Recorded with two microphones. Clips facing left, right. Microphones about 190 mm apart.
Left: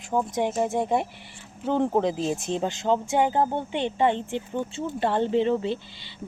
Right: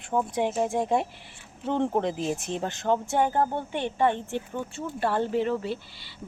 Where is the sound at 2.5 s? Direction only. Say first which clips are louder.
Left 3 dB; 20° left (ahead or behind).